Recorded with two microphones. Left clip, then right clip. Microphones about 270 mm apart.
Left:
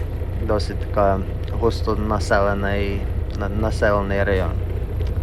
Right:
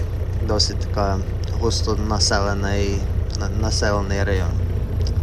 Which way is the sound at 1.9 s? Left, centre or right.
Centre.